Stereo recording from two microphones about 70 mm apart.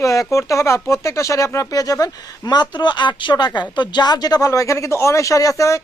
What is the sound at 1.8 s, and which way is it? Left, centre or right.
Speech, left.